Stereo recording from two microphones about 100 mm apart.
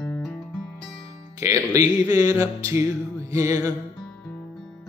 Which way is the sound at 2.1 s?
35° right (ahead or behind).